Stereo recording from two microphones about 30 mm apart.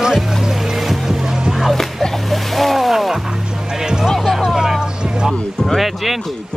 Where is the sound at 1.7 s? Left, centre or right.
Centre.